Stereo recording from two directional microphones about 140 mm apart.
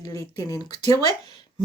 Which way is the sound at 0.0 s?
25° left (ahead or behind).